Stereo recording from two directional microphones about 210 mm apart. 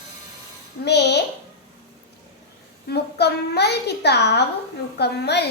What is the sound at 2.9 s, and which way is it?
A child's voice, 50° left (ahead or behind).